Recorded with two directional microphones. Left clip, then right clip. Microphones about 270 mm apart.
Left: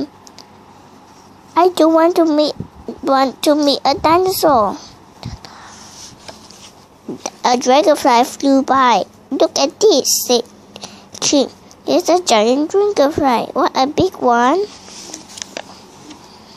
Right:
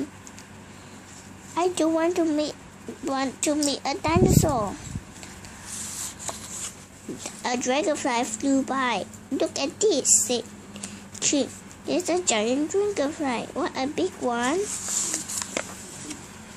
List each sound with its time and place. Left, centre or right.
1.5 s speech: left
7.2 s speech: left